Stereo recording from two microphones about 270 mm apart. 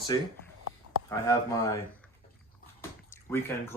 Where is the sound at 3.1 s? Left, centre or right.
Centre.